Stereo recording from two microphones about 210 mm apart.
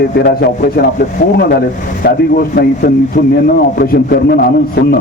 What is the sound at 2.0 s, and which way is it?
Speech, 45° left (ahead or behind).